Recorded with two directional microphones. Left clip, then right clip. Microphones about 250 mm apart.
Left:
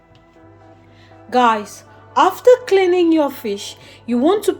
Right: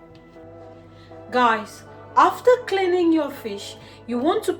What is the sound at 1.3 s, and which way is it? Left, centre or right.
A woman's voice, left.